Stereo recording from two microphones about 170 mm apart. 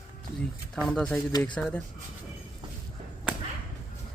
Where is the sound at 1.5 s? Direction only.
5° left (ahead or behind).